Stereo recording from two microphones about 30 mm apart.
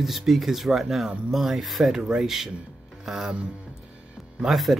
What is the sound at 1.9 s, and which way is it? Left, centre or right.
Speech, right.